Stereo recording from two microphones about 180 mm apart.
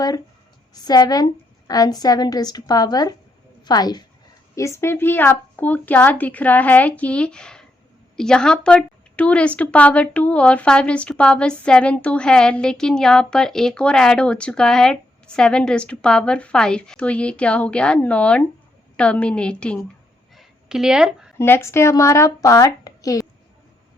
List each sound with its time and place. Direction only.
0.7 s a woman's voice: 20° left (ahead or behind); by 19.8 s 5° left (ahead or behind)
20.3 s a sound: centre (ahead or behind)
21.3 s speech: 15° left (ahead or behind)